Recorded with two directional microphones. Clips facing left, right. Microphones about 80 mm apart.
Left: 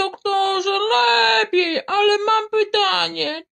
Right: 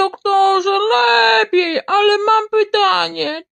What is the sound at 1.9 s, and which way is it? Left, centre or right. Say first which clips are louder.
Speech: right 4 dB; right.